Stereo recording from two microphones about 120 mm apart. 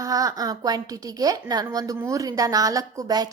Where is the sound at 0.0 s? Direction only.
30° right (ahead or behind).